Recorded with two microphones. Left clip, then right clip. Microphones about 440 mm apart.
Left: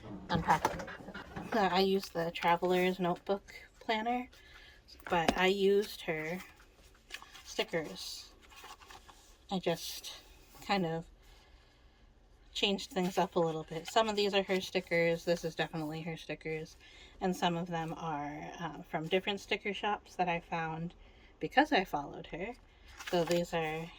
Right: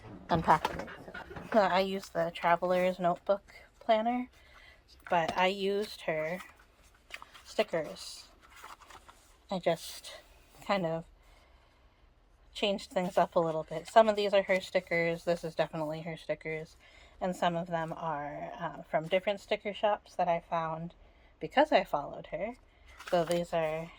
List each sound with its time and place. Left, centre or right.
0.3 s speech: centre
7.1 s a sound: centre
9.5 s speech: centre
12.5 s speech: centre